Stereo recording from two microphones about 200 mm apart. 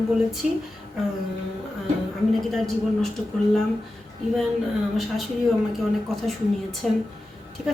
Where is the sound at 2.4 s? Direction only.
Centre (ahead or behind).